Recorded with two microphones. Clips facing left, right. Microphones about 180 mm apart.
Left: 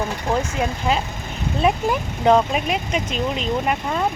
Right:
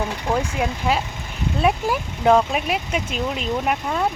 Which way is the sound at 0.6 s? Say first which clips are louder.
Even; 5° right (ahead or behind).